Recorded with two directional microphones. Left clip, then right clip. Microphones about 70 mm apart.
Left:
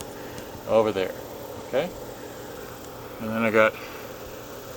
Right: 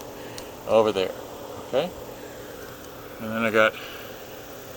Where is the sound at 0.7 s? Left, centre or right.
Right.